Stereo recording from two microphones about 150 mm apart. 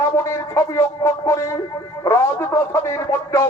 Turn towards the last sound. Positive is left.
turn(degrees=20)  # may be behind; listen again after turning